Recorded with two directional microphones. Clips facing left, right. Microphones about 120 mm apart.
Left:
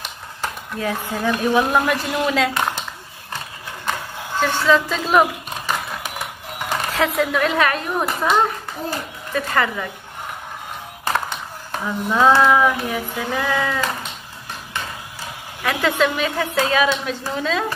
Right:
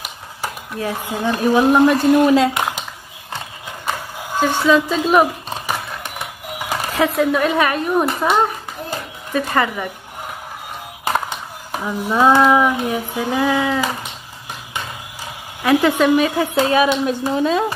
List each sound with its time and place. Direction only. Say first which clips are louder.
0.0 s a sound: right 1 dB; 10° right (ahead or behind)
1.3 s a woman's voice: right 4 dB; 30° right (ahead or behind)
2.0 s speech: right 9 dB; 45° right (ahead or behind)
2.3 s speech: right 5 dB; 20° right (ahead or behind)
3.8 s a sound: right 1 dB; 10° right (ahead or behind)
5.9 s a sound: even; centre (ahead or behind)
7.2 s a woman's voice: right 3 dB; 15° right (ahead or behind)
8.0 s speech: even; centre (ahead or behind)
9.3 s a woman's voice: right 2 dB; 15° right (ahead or behind)
11.1 s speech: right 2 dB; 15° right (ahead or behind)
15.6 s a woman's voice: right 5 dB; 20° right (ahead or behind)